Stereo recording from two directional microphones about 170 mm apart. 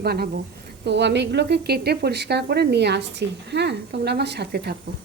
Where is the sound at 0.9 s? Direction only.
90° right; by 4.8 s 70° right (ahead or behind).